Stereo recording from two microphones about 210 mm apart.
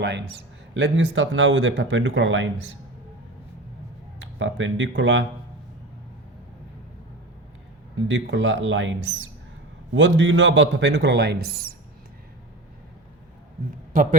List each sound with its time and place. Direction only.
0.0 s speech: 55° right (ahead or behind)
4.2 s speech: 65° right (ahead or behind)
8.0 s speech: 65° right (ahead or behind); by 11.7 s 45° right (ahead or behind)
13.9 s a man's voice: 40° right (ahead or behind)